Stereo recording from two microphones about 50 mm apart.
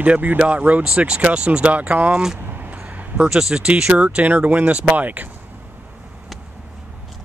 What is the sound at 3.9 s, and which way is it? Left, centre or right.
Speech, right.